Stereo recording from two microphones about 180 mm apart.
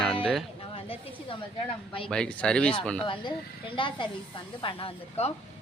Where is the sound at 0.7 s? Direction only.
30° left (ahead or behind).